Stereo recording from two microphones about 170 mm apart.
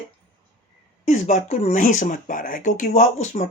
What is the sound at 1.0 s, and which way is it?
Speech, 45° left (ahead or behind).